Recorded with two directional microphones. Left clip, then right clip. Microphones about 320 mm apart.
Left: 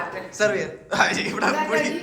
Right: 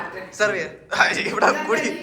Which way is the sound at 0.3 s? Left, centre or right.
Centre.